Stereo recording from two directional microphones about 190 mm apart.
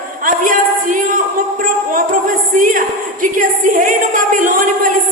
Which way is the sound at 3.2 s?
45° right (ahead or behind).